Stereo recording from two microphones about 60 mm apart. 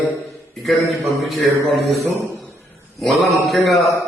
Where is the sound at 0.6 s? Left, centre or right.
Centre.